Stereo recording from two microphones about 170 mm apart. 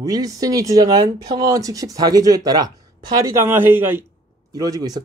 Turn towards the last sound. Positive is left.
turn(degrees=-25)  # may be behind; listen again after turning